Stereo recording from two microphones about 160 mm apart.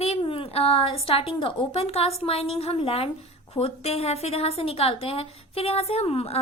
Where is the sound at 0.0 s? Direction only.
35° left (ahead or behind).